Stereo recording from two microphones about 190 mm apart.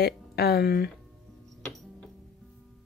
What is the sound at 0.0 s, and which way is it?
Speech, 55° left (ahead or behind).